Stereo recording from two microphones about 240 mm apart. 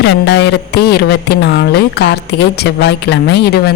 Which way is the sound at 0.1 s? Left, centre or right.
Left.